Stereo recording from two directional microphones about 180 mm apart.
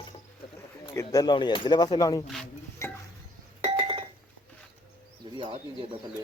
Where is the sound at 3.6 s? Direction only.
35° right (ahead or behind).